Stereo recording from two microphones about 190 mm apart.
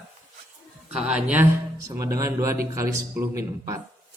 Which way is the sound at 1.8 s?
15° right (ahead or behind).